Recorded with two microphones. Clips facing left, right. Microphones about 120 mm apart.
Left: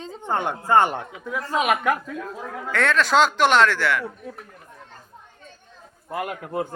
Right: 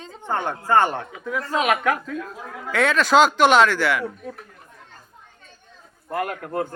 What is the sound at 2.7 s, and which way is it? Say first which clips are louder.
Speech: right 2 dB; 5° right (ahead or behind).